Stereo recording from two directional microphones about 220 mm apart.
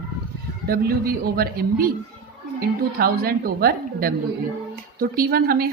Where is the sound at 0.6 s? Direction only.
45° right (ahead or behind).